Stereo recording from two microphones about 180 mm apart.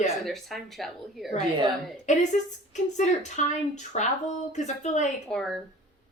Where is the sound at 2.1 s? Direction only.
40° left (ahead or behind).